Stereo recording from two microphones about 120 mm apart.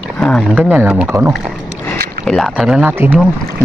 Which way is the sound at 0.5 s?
10° right (ahead or behind).